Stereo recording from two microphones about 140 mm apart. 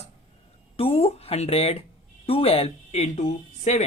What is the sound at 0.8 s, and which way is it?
A woman's voice, 45° left (ahead or behind).